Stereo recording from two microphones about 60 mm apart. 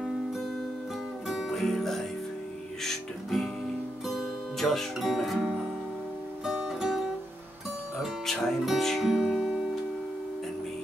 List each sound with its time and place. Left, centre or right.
1.2 s music: centre
4.6 s speech: centre
6.8 s music: centre
9.1 s music: centre